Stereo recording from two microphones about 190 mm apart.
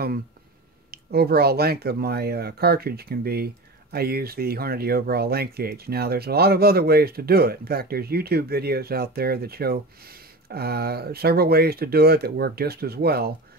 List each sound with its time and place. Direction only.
0.9 s speech: 55° right (ahead or behind)